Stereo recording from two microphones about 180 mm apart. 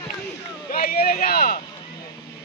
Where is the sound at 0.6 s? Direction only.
55° left (ahead or behind).